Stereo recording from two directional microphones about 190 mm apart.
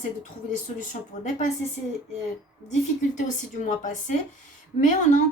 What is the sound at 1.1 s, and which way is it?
Speech, 40° left (ahead or behind).